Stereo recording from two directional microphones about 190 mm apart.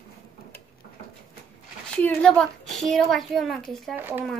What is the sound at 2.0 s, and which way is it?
A woman's voice, 5° left (ahead or behind).